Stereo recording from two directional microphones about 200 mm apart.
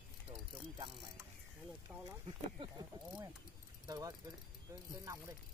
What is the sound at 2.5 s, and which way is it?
Speech, 20° right (ahead or behind).